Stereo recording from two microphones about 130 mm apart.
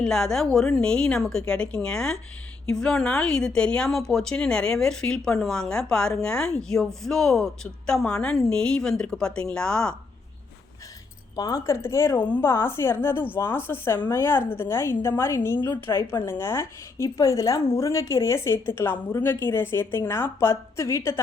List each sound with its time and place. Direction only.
0.0 s a woman's voice: 5° left (ahead or behind)
11.3 s a woman's voice: 25° left (ahead or behind)